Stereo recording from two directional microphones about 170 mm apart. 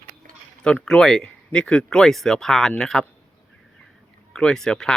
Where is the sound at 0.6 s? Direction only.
5° left (ahead or behind).